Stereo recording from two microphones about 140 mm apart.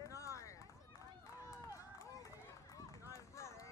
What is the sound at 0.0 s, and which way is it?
Run, 20° left (ahead or behind).